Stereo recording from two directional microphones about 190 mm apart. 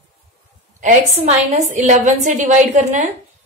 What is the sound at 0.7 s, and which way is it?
A woman's voice, 40° right (ahead or behind).